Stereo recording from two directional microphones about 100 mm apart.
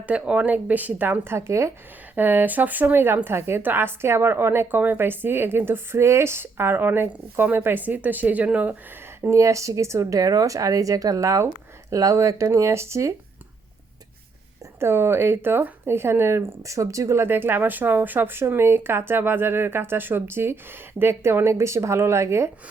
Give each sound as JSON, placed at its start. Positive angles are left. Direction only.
{"t": 0.0, "sound": "speech", "side_deg": -15}
{"t": 9.3, "sound": "speech", "side_deg": -30}
{"t": 14.8, "sound": "speech", "side_deg": -25}